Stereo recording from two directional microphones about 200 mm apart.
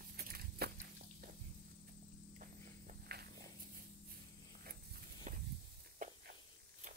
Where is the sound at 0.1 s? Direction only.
50° right (ahead or behind).